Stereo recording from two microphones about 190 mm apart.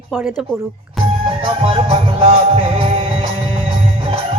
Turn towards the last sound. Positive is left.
turn(degrees=-30)  # may be behind; listen again after turning